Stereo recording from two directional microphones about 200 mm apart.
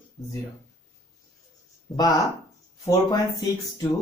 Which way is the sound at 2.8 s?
20° left (ahead or behind).